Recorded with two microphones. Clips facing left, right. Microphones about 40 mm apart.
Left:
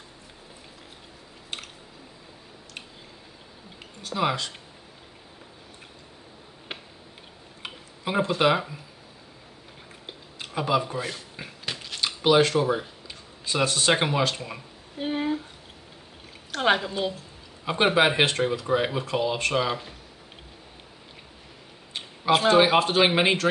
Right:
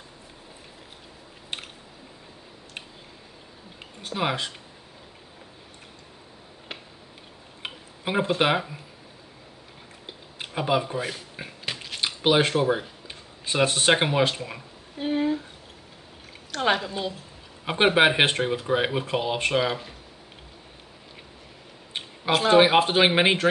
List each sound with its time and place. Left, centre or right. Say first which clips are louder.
4.1 s speech: left 1 dB; centre
7.6 s tick-tock: right 1 dB; centre
10.4 s a sound: even; centre
13.5 s speech: right 2 dB; right
14.3 s speech: right 1 dB; centre
16.5 s a woman's voice: left 1 dB; centre
17.9 s speech: right 1 dB; right
22.5 s speech: right 3 dB; centre